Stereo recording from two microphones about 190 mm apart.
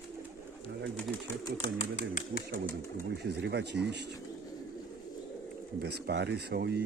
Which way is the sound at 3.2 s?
60° right (ahead or behind).